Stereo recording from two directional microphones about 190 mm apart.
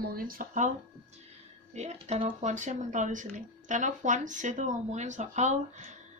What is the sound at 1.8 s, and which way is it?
Speech, 35° right (ahead or behind).